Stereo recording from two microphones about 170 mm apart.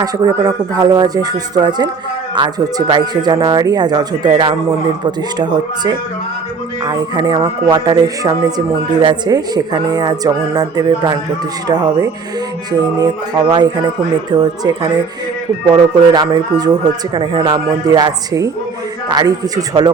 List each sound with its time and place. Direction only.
0.0 s speech: 20° right (ahead or behind)